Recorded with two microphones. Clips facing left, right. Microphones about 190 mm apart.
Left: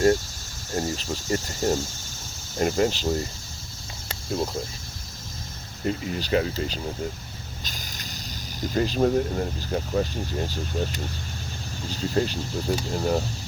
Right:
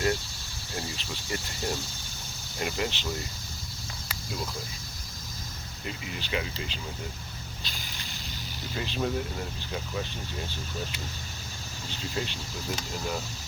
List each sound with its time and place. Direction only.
0.7 s speech: 45° left (ahead or behind)
5.8 s speech: 40° left (ahead or behind)
7.6 s vehicle: 45° left (ahead or behind)
8.6 s speech: 45° left (ahead or behind)